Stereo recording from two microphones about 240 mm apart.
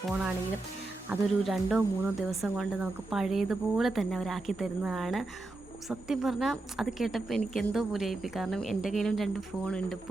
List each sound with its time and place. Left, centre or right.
0.1 s speech: centre